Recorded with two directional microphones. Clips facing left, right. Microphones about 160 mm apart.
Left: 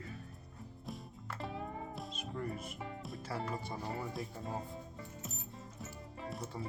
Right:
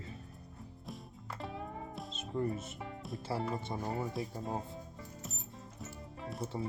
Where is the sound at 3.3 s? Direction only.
Centre (ahead or behind).